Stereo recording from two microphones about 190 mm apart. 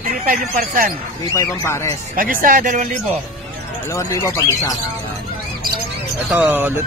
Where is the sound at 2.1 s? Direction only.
45° right (ahead or behind).